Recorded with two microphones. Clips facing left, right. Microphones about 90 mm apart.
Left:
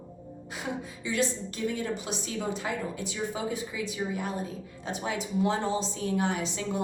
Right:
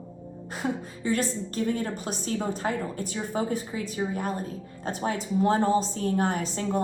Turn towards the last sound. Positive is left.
turn(degrees=-45)  # may be behind; listen again after turning